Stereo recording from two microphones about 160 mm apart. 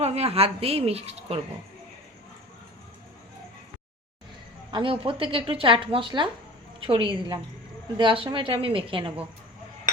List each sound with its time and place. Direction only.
0.0 s a woman's voice: 40° right (ahead or behind)
4.7 s speech: 30° right (ahead or behind)